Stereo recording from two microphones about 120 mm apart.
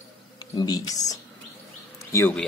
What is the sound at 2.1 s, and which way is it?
Speech, 20° left (ahead or behind).